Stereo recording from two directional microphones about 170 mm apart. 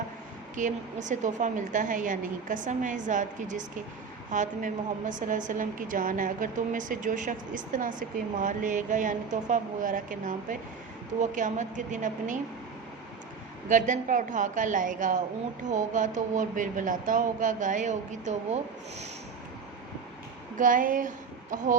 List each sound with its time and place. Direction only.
0.5 s a woman's voice: 45° right (ahead or behind)
13.7 s a woman's voice: 50° right (ahead or behind)
20.6 s a woman's voice: 50° right (ahead or behind)